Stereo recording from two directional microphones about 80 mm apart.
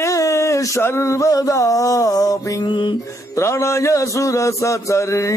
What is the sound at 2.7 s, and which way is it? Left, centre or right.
Music, left.